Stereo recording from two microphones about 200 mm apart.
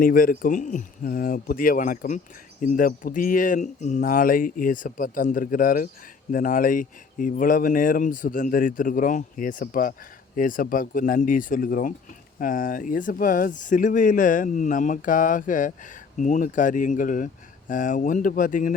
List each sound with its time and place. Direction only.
0.0 s speech: 45° left (ahead or behind)